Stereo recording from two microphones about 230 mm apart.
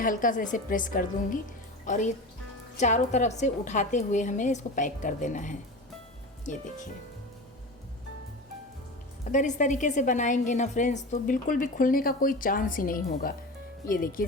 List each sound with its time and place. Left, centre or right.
0.0 s a woman's voice: left
9.3 s a woman's voice: left